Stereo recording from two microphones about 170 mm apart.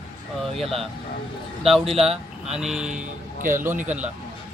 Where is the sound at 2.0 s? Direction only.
5° right (ahead or behind).